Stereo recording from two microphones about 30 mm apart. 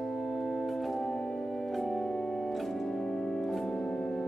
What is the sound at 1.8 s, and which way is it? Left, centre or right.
Organ, centre.